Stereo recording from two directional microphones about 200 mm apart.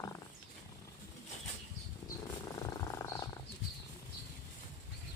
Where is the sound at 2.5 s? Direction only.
15° left (ahead or behind).